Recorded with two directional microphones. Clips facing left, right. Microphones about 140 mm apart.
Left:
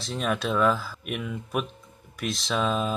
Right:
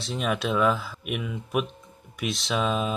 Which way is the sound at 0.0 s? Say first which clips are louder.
Even; centre (ahead or behind).